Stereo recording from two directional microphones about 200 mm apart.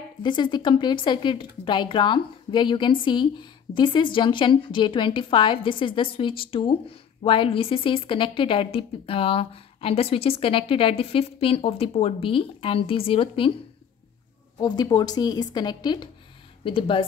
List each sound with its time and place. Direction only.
0.2 s speech: 20° left (ahead or behind)
14.6 s speech: 20° left (ahead or behind)